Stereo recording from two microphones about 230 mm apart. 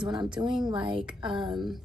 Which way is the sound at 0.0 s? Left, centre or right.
Centre.